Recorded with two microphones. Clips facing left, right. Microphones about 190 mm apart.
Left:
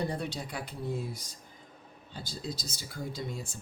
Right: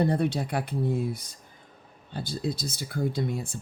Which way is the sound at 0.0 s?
60° right (ahead or behind).